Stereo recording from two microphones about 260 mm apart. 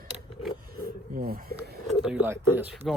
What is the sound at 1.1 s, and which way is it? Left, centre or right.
Speech, right.